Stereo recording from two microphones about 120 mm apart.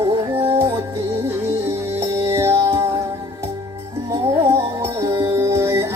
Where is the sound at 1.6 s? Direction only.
20° right (ahead or behind).